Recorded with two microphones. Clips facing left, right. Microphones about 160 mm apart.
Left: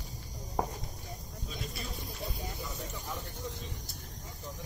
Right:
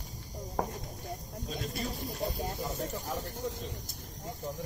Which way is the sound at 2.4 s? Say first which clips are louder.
Right 6 dB; 55° right (ahead or behind).